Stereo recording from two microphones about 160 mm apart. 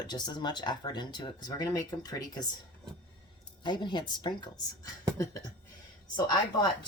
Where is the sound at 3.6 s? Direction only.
30° left (ahead or behind).